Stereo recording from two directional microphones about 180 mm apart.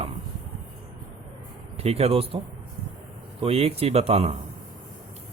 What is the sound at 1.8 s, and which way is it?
Speech, 35° right (ahead or behind).